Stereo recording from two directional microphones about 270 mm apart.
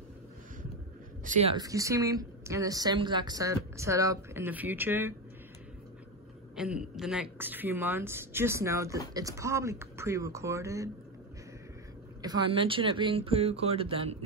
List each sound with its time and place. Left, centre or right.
1.2 s speech: right; by 5.1 s centre
6.5 s speech: centre
12.2 s speech: centre